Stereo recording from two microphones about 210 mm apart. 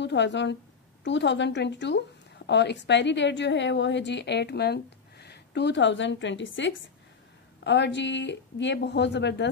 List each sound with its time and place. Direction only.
0.0 s speech: 55° left (ahead or behind)